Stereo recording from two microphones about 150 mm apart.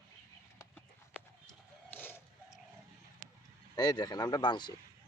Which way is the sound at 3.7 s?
25° left (ahead or behind).